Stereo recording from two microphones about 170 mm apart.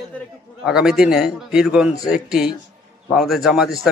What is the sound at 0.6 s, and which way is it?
A man's voice, 5° right (ahead or behind).